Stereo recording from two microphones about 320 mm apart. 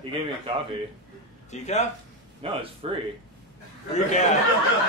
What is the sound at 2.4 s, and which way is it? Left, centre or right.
Speech, centre.